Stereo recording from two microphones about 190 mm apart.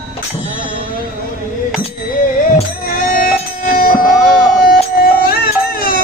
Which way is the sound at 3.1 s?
50° left (ahead or behind).